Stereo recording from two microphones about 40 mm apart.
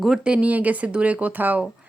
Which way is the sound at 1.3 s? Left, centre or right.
Right.